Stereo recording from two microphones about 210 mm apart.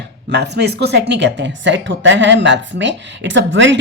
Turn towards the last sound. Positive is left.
turn(degrees=-60)  # may be behind; listen again after turning